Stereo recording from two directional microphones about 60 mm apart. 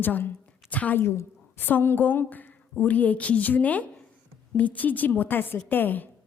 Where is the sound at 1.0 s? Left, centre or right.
Left.